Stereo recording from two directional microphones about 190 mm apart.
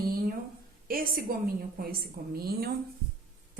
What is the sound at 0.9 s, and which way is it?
A woman's voice, 50° right (ahead or behind).